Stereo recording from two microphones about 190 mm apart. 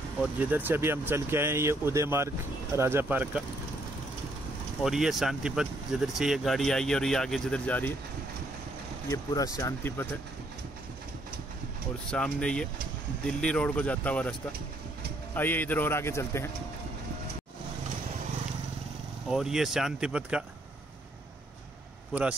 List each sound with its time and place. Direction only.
0.2 s speech: 10° right (ahead or behind)
4.8 s speech: centre (ahead or behind)
9.1 s speech: 20° left (ahead or behind)
12.1 s speech: 5° left (ahead or behind)
15.3 s speech: 10° left (ahead or behind)
19.2 s speech: centre (ahead or behind)